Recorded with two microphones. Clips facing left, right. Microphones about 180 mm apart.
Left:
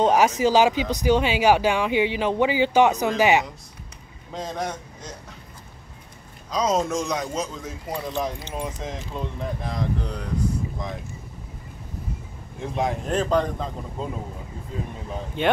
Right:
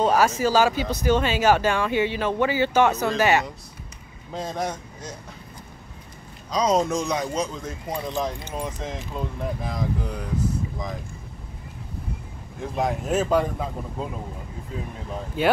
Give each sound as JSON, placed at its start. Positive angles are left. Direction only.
{"t": 0.0, "sound": "a sound", "side_deg": 20}
{"t": 0.4, "sound": "speech", "side_deg": 20}
{"t": 4.3, "sound": "speech", "side_deg": -5}
{"t": 6.5, "sound": "speech", "side_deg": 0}
{"t": 12.5, "sound": "speech", "side_deg": 0}
{"t": 15.1, "sound": "speech", "side_deg": -5}